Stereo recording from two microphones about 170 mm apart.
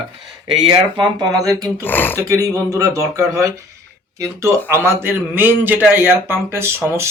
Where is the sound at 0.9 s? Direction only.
25° right (ahead or behind).